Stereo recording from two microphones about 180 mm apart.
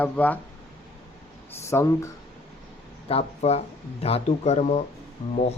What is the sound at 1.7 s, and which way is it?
Speech, 15° left (ahead or behind).